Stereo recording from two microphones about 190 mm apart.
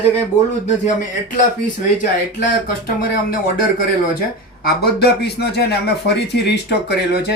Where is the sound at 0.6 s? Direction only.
40° left (ahead or behind).